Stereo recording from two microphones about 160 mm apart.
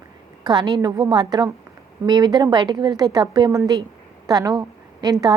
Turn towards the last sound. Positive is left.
turn(degrees=-25)  # may be behind; listen again after turning